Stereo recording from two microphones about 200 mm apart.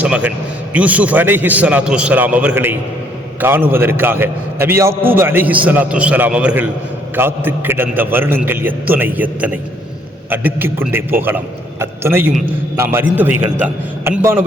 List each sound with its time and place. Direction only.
0.0 s a man's voice: 5° right (ahead or behind)